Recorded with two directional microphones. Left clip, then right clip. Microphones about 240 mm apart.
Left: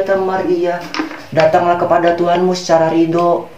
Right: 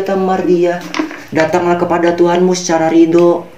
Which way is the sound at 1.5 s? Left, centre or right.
Right.